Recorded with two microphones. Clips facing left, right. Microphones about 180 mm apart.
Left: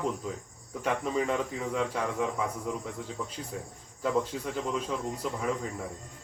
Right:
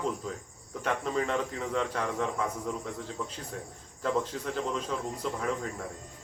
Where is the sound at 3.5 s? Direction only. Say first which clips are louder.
Left 1 dB; 5° left (ahead or behind).